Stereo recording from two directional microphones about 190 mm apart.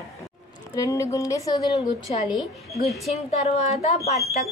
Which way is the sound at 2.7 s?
Centre (ahead or behind).